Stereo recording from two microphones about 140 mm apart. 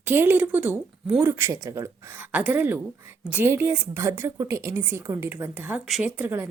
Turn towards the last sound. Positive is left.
turn(degrees=-15)  # may be behind; listen again after turning